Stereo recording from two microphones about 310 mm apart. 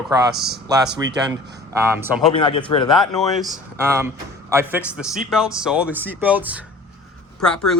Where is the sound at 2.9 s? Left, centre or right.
Centre.